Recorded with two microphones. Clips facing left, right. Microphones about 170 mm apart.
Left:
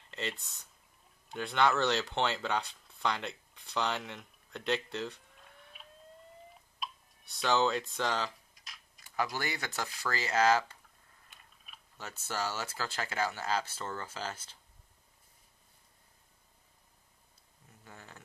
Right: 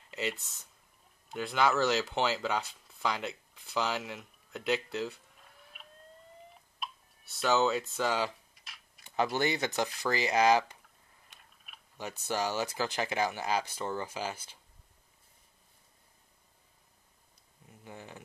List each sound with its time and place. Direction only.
0.0 s speech: 5° right (ahead or behind)
6.8 s a sound: centre (ahead or behind)
9.0 s speech: 25° right (ahead or behind)
11.2 s a sound: centre (ahead or behind)
12.0 s speech: 15° right (ahead or behind)
17.8 s speech: 15° right (ahead or behind)